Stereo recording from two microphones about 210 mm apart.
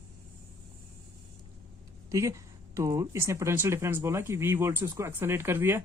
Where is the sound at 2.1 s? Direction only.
15° right (ahead or behind).